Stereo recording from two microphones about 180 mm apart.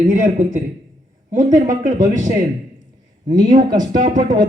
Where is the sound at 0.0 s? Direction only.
40° right (ahead or behind).